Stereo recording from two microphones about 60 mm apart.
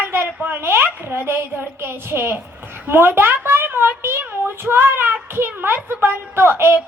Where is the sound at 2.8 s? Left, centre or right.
Right.